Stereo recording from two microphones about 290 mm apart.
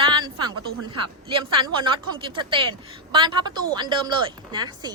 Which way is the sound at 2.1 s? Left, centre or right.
Centre.